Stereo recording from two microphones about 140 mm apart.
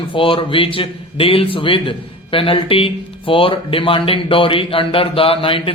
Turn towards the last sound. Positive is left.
turn(degrees=40)  # may be behind; listen again after turning